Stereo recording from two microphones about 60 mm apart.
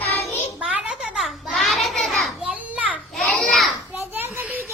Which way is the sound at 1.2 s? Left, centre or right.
Centre.